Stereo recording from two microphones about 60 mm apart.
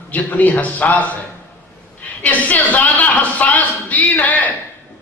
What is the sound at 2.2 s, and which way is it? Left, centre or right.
A woman's voice, left.